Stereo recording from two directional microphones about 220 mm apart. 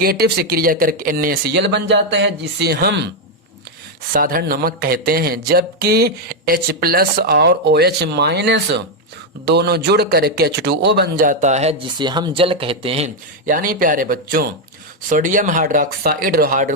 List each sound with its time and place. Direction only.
0.0 s speech: 45° right (ahead or behind)
4.1 s speech: 40° right (ahead or behind)